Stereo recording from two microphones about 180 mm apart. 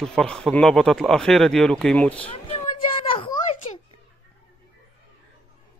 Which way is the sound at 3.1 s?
35° left (ahead or behind).